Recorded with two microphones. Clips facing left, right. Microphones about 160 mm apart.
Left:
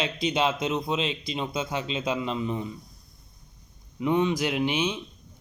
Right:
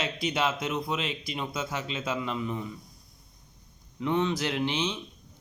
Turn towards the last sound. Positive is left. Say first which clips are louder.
# left 3 dB
turn(degrees=10)  # may be behind; listen again after turning